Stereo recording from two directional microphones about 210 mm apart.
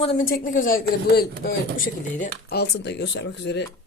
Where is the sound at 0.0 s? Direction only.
40° left (ahead or behind).